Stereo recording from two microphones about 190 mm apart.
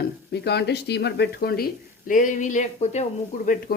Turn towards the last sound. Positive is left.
turn(degrees=45)  # may be behind; listen again after turning